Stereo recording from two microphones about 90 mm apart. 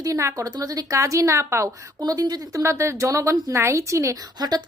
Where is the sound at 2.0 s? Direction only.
45° right (ahead or behind).